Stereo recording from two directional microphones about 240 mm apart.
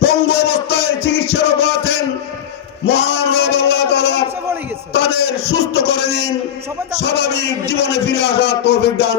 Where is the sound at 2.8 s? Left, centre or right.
Left.